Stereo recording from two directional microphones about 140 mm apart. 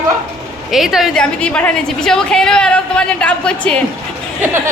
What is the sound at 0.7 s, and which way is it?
A woman's voice, centre (ahead or behind).